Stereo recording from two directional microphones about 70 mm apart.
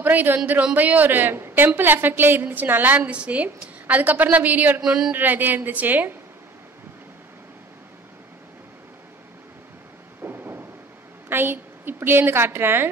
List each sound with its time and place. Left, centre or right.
0.0 s a sound: right
0.7 s a woman's voice: right
3.1 s a woman's voice: centre
4.8 s speech: centre
5.1 s a woman's voice: right
10.2 s a sound: right
11.2 s a woman's voice: right